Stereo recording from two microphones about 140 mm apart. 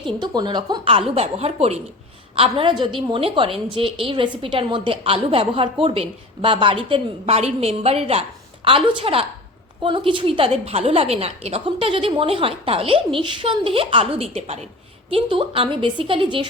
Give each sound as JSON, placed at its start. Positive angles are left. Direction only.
{"t": 0.0, "sound": "a woman's voice", "side_deg": -30}
{"t": 1.1, "sound": "a woman's voice", "side_deg": -45}